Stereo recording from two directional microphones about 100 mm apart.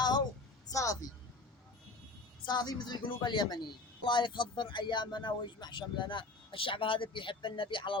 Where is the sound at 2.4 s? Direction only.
45° left (ahead or behind).